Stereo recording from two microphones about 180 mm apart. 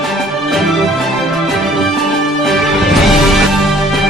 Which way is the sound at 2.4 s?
Centre (ahead or behind).